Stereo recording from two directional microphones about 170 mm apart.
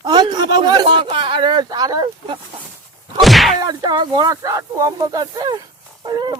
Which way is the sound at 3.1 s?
Centre (ahead or behind).